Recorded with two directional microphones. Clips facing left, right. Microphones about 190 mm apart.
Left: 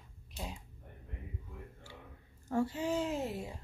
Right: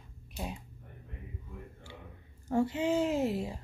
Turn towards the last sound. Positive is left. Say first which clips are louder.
# right 6 dB
turn(degrees=-90)